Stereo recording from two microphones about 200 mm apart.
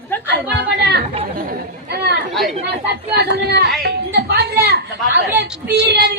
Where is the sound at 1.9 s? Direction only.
55° right (ahead or behind).